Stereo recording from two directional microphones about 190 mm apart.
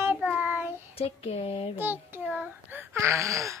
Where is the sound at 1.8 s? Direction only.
10° right (ahead or behind).